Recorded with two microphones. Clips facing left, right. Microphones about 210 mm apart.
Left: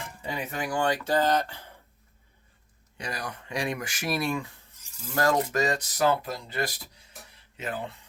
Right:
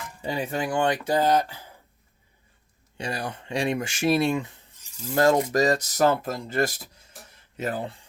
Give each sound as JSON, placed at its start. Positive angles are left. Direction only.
{"t": 0.2, "sound": "speech", "side_deg": -30}
{"t": 3.0, "sound": "speech", "side_deg": -30}